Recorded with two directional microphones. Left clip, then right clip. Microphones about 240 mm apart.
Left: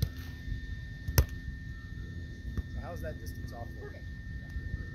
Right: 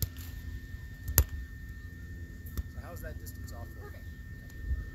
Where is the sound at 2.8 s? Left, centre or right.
Centre.